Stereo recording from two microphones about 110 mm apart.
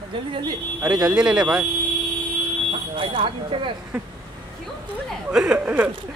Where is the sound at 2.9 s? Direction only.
50° right (ahead or behind).